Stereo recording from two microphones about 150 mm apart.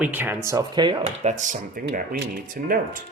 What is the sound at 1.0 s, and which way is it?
Speech, 50° right (ahead or behind).